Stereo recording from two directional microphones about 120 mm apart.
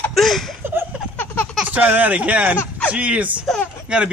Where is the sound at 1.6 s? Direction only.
15° right (ahead or behind).